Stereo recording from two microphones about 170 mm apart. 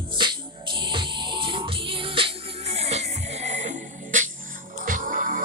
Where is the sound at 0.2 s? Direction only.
25° right (ahead or behind).